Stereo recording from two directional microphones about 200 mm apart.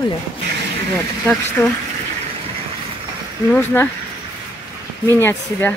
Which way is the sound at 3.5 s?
10° left (ahead or behind).